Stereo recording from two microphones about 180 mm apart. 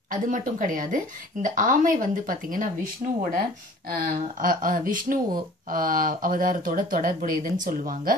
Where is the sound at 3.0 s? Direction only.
35° right (ahead or behind).